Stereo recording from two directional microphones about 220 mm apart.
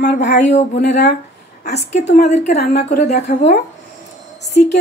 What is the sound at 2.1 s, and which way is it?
A woman's voice, 50° left (ahead or behind).